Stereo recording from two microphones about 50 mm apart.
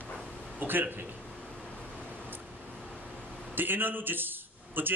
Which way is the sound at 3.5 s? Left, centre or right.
Right.